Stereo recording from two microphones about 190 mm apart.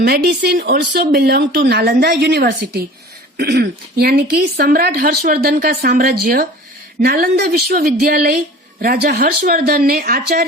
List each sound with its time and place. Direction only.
0.0 s a woman's voice: 60° right (ahead or behind)